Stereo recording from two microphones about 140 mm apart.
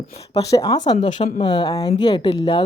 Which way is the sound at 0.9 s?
40° left (ahead or behind).